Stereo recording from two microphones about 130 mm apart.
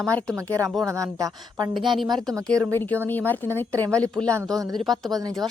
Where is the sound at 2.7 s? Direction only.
15° left (ahead or behind).